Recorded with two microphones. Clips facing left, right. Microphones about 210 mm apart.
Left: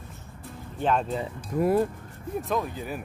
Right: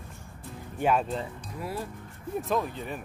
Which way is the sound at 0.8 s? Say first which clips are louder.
Even; 5° right (ahead or behind).